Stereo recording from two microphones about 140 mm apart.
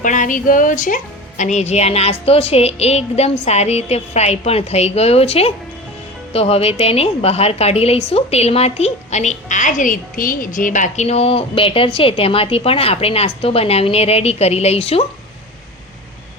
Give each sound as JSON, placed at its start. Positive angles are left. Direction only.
{"t": 0.0, "sound": "a woman's voice", "side_deg": 65}